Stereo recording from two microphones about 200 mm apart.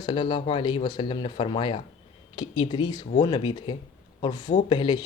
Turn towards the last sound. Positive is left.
turn(degrees=25)  # may be behind; listen again after turning